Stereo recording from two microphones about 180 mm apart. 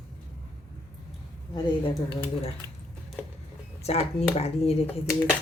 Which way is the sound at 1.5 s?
30° left (ahead or behind).